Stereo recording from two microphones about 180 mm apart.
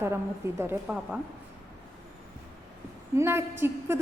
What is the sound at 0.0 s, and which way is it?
A woman's voice, 15° right (ahead or behind).